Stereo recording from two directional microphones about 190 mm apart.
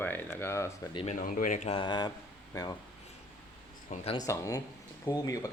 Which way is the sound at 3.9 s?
30° left (ahead or behind).